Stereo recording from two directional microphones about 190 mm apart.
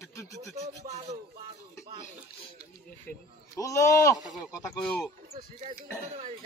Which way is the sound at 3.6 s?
15° left (ahead or behind).